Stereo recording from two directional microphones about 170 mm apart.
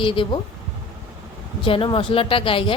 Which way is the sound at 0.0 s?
30° left (ahead or behind).